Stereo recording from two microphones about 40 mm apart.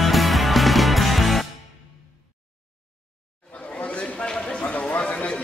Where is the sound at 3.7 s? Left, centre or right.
Left.